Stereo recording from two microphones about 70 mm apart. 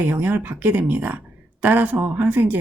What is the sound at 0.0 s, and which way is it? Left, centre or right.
Speech, right.